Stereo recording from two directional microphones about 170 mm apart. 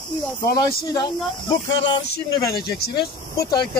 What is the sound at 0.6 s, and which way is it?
Speech, 20° left (ahead or behind).